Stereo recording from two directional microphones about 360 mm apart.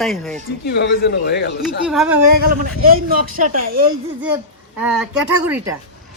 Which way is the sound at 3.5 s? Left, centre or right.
Right.